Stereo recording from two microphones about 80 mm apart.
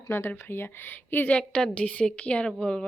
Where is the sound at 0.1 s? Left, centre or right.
Left.